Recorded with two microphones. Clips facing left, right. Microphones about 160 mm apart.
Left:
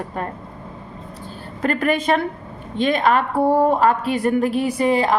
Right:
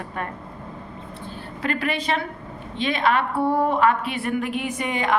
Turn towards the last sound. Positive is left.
turn(degrees=35)  # may be behind; listen again after turning